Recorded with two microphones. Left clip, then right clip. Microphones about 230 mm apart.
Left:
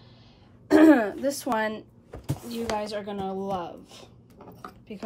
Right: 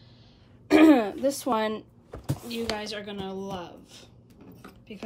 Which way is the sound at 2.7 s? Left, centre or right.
Right.